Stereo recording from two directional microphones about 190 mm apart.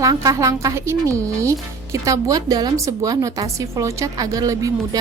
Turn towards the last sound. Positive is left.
turn(degrees=-20)  # may be behind; listen again after turning